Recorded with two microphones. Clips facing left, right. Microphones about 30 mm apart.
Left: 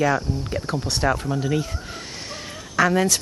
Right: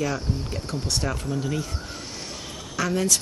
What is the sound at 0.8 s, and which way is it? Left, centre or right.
Speech, centre.